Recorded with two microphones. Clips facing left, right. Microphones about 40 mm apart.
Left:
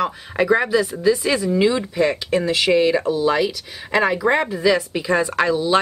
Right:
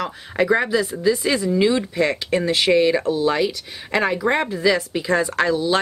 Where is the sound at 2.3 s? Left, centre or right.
Centre.